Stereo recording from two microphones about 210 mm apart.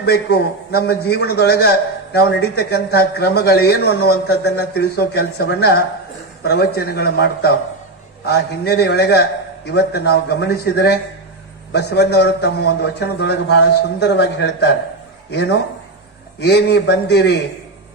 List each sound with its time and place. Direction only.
0.0 s a man's voice: 50° left (ahead or behind)